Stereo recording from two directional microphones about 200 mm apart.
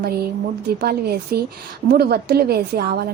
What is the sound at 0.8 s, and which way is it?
A woman's voice, 50° right (ahead or behind).